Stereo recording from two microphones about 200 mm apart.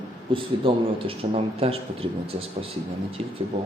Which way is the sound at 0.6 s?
30° right (ahead or behind).